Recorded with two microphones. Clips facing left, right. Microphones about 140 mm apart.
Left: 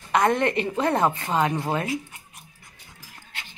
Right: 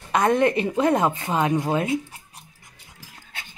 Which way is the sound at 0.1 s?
15° right (ahead or behind).